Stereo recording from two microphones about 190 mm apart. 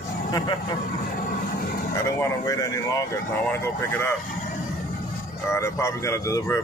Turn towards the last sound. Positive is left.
turn(degrees=15)  # may be behind; listen again after turning